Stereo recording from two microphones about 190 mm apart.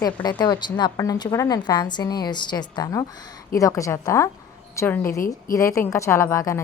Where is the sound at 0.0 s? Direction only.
20° left (ahead or behind).